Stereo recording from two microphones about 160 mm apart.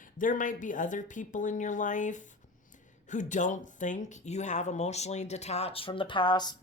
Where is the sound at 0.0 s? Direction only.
55° left (ahead or behind).